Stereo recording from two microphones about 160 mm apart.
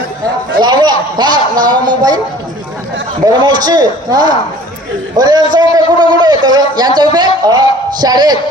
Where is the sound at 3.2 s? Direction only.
25° right (ahead or behind).